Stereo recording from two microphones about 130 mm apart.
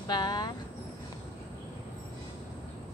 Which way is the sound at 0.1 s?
30° left (ahead or behind).